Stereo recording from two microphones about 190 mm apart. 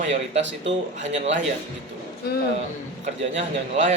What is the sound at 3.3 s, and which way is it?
Speech, 40° right (ahead or behind).